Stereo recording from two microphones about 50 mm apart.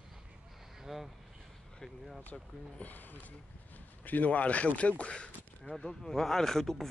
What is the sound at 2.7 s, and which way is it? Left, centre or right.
Speech, left.